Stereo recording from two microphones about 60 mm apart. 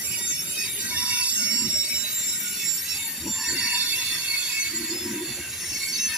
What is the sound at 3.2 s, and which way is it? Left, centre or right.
Train wheels squealing, centre.